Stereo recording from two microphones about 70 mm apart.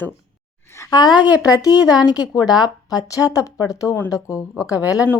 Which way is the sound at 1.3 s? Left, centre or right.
Centre.